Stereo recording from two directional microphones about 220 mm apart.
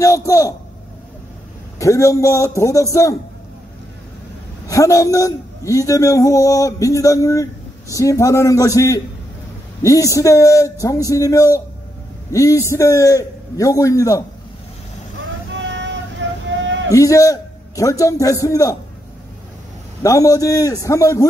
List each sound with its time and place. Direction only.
0.0 s a man's voice: 15° left (ahead or behind)
1.8 s a man's voice: 15° left (ahead or behind)
4.6 s a man's voice: 15° left (ahead or behind)
15.6 s vehicle: 55° right (ahead or behind)
16.9 s a man's voice: 15° left (ahead or behind)
20.0 s a man's voice: 15° left (ahead or behind)